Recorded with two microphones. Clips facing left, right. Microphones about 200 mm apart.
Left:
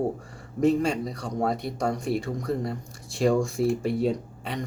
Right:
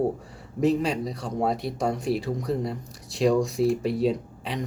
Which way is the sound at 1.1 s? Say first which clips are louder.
Right 1 dB; 25° right (ahead or behind).